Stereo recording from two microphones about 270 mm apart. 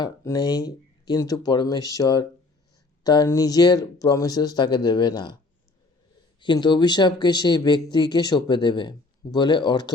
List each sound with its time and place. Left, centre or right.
0.0 s speech: centre
6.4 s speech: centre